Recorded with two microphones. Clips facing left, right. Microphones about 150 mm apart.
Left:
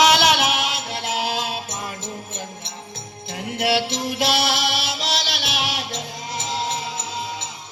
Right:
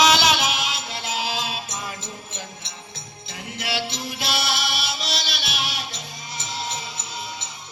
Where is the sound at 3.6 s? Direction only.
65° left (ahead or behind); by 6.0 s 90° left.